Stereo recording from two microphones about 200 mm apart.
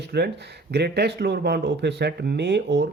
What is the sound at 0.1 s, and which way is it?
Speech, 55° right (ahead or behind).